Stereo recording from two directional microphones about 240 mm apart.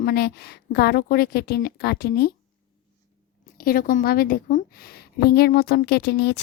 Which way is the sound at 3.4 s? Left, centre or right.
Left.